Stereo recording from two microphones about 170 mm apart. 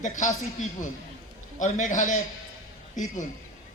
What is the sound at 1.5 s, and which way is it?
Speech, 45° left (ahead or behind).